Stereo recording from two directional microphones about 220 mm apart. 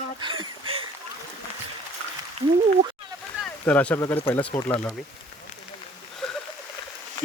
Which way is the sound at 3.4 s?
5° left (ahead or behind).